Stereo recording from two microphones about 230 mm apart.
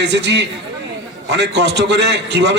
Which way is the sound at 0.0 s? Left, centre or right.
Right.